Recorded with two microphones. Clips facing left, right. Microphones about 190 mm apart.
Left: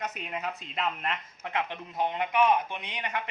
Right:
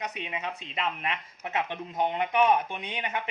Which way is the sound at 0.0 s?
Centre (ahead or behind).